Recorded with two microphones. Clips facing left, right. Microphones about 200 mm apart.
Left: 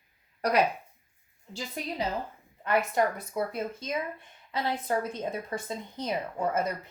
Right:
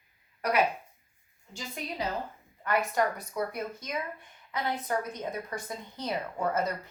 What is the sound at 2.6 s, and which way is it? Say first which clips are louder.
A woman's voice: left 2 dB; 25° left (ahead or behind).